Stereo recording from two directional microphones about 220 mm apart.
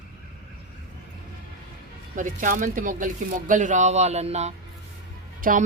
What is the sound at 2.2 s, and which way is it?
Speech, 35° right (ahead or behind).